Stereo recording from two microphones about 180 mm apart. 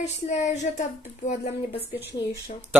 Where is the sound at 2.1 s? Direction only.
20° left (ahead or behind).